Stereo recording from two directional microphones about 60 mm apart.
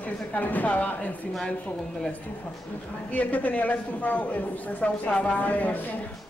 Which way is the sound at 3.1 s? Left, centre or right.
Left.